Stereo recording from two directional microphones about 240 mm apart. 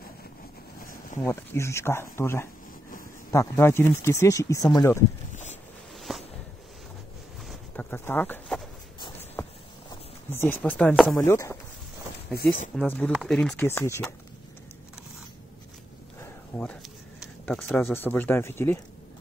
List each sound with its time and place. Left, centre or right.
1.2 s speech: centre
5.9 s a sound: centre
7.4 s a sound: centre
11.1 s speech: centre
12.4 s speech: left
12.7 s speech: centre
16.5 s speech: centre